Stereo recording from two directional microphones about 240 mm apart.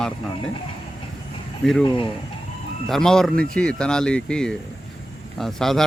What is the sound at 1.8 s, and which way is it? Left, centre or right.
Speech, left.